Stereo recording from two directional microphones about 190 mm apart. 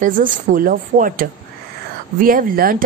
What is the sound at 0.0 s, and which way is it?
Speech, 45° right (ahead or behind).